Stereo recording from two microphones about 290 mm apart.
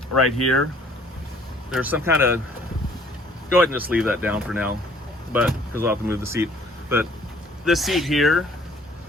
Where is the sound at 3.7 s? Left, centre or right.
Centre.